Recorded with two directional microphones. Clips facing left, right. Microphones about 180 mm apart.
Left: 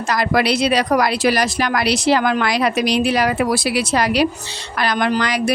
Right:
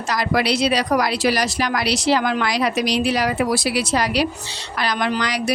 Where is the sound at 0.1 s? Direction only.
55° left (ahead or behind).